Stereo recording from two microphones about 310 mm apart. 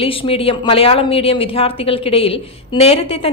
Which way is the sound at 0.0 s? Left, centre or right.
Centre.